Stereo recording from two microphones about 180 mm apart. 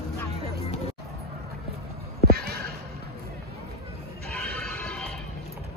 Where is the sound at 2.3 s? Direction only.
60° right (ahead or behind).